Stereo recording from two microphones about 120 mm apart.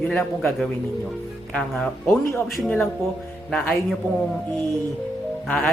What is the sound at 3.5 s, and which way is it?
Speech, 15° left (ahead or behind).